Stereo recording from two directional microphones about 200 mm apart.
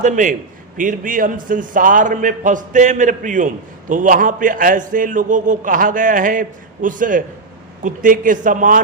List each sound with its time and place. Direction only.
0.0 s a man's voice: 40° right (ahead or behind)